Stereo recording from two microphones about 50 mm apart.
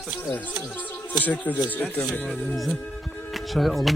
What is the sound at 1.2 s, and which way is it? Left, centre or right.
Speech, left.